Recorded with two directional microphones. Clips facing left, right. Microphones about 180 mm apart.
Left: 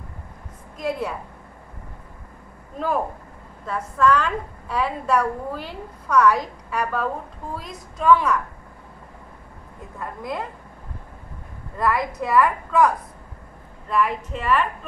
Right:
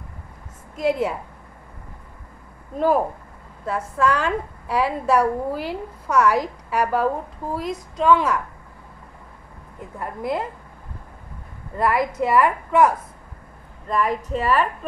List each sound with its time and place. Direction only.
0.7 s a woman's voice: 25° right (ahead or behind)
3.6 s a woman's voice: 30° right (ahead or behind)
9.9 s a woman's voice: 30° right (ahead or behind)
11.8 s a woman's voice: 25° right (ahead or behind)
13.8 s a woman's voice: 40° right (ahead or behind)